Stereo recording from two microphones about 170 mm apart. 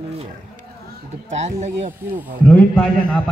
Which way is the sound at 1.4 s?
40° right (ahead or behind).